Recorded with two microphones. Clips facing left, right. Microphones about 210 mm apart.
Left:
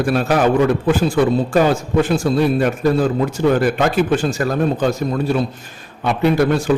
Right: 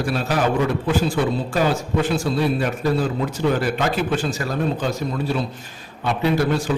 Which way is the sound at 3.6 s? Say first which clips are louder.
Left 5 dB; 50° left (ahead or behind).